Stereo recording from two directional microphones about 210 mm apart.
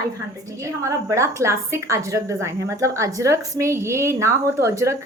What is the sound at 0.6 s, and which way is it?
A woman's voice, 15° right (ahead or behind).